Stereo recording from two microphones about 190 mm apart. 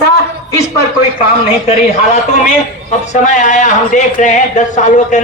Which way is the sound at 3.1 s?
40° left (ahead or behind).